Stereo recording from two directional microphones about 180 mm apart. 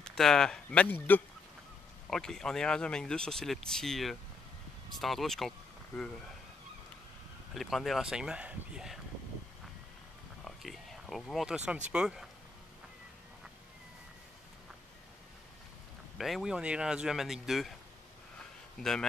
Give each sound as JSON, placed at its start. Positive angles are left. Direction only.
{"t": 0.0, "sound": "speech", "side_deg": 5}
{"t": 7.5, "sound": "speech", "side_deg": 0}
{"t": 10.4, "sound": "a sound", "side_deg": 0}
{"t": 11.9, "sound": "speech", "side_deg": -5}
{"t": 16.2, "sound": "speech", "side_deg": 0}
{"t": 18.8, "sound": "speech", "side_deg": 5}